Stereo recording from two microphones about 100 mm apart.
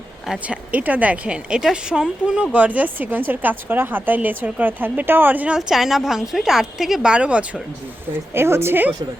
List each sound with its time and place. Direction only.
0.3 s speech: 10° right (ahead or behind)
5.5 s a woman's voice: 5° right (ahead or behind)
8.3 s speech: 25° right (ahead or behind)